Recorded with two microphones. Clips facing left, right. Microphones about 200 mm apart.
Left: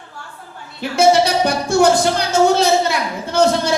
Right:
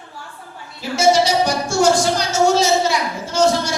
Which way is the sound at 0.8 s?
60° left (ahead or behind).